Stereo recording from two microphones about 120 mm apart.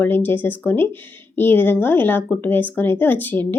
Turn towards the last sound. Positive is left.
turn(degrees=15)  # may be behind; listen again after turning